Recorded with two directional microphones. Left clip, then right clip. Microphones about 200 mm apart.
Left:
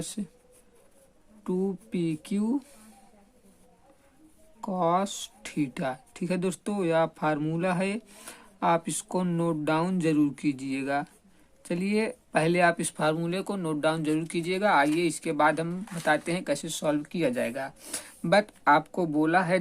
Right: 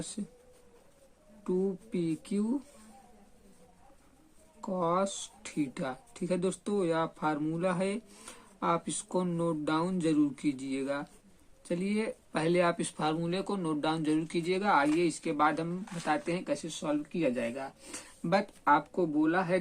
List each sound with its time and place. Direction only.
1.5 s speech: 40° left (ahead or behind)
4.6 s speech: 35° left (ahead or behind)